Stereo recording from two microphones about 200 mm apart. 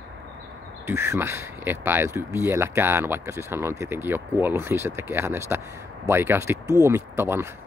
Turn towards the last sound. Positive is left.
turn(degrees=-10)  # may be behind; listen again after turning